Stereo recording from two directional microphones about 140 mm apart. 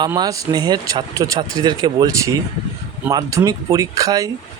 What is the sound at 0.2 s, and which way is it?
Speech, 25° right (ahead or behind).